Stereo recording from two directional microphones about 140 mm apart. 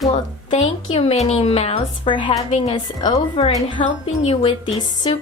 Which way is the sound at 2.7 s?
30° left (ahead or behind).